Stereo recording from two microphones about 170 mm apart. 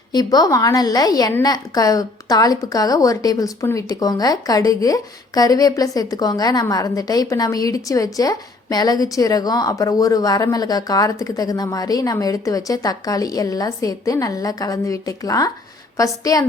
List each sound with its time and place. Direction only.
0.1 s a woman's voice: 20° left (ahead or behind)